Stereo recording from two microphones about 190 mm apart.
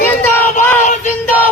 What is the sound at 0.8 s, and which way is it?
Child singing, 40° left (ahead or behind).